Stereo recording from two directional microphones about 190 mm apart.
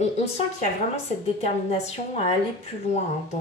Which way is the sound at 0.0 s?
40° left (ahead or behind).